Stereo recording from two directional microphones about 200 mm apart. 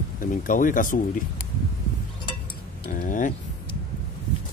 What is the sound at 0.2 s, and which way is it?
Speech, 40° left (ahead or behind).